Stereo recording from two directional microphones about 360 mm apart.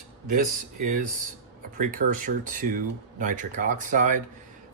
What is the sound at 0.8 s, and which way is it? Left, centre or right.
Speech, right.